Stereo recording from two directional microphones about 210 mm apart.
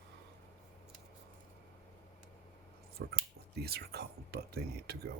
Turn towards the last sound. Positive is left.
turn(degrees=-50)  # may be behind; listen again after turning